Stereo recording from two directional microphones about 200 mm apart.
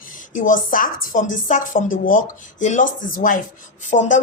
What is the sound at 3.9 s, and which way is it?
Speech, 30° left (ahead or behind).